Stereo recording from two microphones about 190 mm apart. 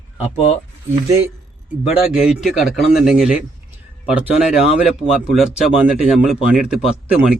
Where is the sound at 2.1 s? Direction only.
Centre (ahead or behind).